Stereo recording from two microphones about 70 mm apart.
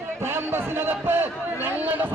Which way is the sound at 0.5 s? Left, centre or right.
Right.